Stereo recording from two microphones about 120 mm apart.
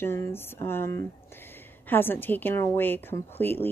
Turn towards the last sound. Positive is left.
turn(degrees=15)  # may be behind; listen again after turning